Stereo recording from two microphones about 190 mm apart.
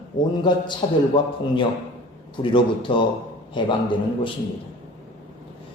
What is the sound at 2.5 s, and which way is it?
A man's voice, 25° left (ahead or behind).